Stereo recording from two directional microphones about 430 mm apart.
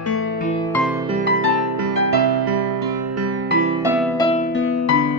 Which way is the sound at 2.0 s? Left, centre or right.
Right.